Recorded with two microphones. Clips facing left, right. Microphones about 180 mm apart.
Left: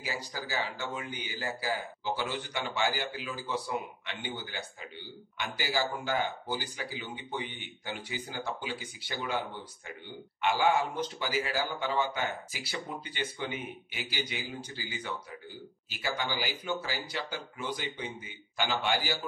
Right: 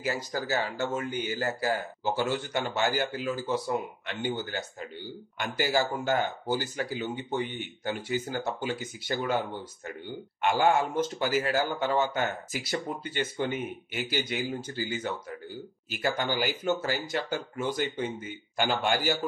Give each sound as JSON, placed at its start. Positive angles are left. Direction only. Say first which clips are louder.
{"t": 0.0, "sound": "speech", "louder": "right 7 dB", "side_deg": -50}
{"t": 10.4, "sound": "speech", "louder": "right 3 dB", "side_deg": -50}
{"t": 15.9, "sound": "speech", "louder": "right 5 dB", "side_deg": -50}